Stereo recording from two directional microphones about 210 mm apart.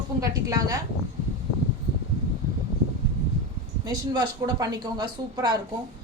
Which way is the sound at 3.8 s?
20° right (ahead or behind).